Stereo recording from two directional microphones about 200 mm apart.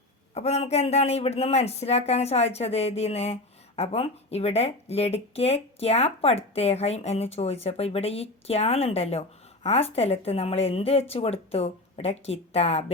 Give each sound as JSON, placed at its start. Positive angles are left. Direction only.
{"t": 0.3, "sound": "speech", "side_deg": 35}